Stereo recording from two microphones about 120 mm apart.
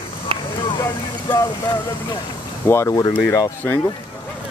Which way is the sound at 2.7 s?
25° left (ahead or behind).